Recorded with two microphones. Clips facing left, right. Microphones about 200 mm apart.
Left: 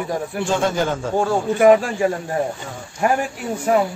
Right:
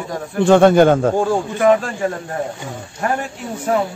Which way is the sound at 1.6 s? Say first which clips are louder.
Left 2 dB; 10° left (ahead or behind).